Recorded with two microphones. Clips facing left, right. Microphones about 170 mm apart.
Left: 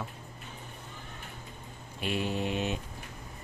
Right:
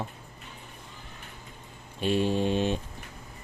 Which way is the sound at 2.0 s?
30° right (ahead or behind).